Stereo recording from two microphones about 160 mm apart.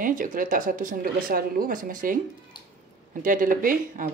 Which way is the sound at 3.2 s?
60° right (ahead or behind).